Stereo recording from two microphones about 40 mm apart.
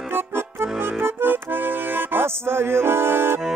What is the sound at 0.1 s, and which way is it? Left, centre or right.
Accordion, right.